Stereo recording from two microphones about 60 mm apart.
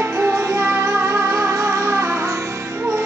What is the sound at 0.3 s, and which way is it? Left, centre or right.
Music, right.